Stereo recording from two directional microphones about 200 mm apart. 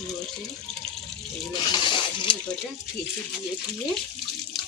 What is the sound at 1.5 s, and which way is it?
Speech, 20° left (ahead or behind).